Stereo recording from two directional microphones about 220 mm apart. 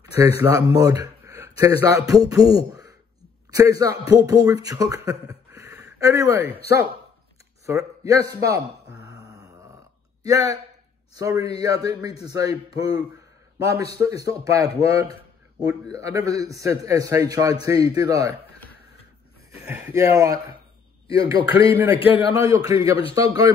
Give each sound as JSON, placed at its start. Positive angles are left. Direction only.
{"t": 0.0, "sound": "a man's voice", "side_deg": -15}
{"t": 7.6, "sound": "a man's voice", "side_deg": -15}
{"t": 10.2, "sound": "a man's voice", "side_deg": -15}
{"t": 19.6, "sound": "a man's voice", "side_deg": -10}
{"t": 21.9, "sound": "a man's voice", "side_deg": 25}
{"t": 22.3, "sound": "a man's voice", "side_deg": -15}